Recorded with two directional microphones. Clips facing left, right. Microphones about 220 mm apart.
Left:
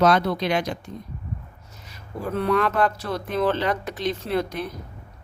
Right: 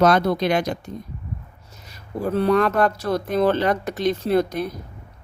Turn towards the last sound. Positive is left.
turn(degrees=-40)  # may be behind; listen again after turning